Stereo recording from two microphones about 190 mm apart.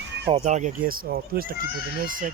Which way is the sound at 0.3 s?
35° right (ahead or behind).